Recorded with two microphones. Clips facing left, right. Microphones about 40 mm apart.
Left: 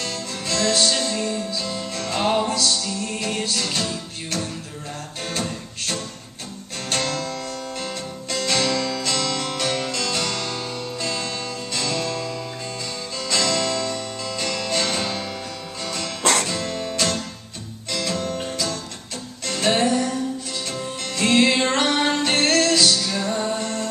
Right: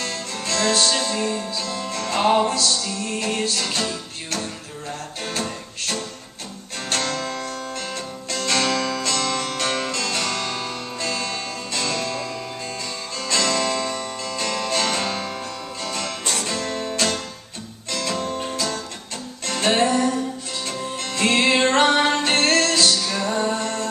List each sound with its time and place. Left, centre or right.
0.0 s music: centre
2.1 s music: centre
5.2 s music: centre
7.7 s guitar: centre
9.6 s music: centre
13.4 s music: centre
14.2 s music: centre
16.2 s music: left
16.4 s music: centre